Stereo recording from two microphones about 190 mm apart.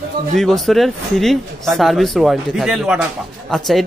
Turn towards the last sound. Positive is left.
turn(degrees=0)  # may be behind; listen again after turning